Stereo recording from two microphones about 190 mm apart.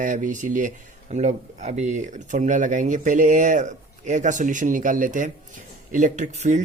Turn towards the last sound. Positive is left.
turn(degrees=-40)  # may be behind; listen again after turning